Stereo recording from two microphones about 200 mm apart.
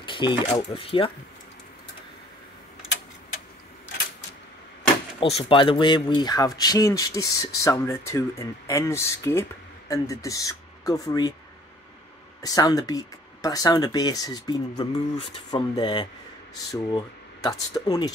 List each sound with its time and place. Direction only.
0.0 s speech: 25° left (ahead or behind)
5.2 s speech: 30° left (ahead or behind)
12.4 s speech: 20° left (ahead or behind)